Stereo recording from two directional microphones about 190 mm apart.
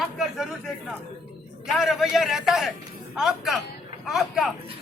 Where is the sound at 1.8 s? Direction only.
Centre (ahead or behind).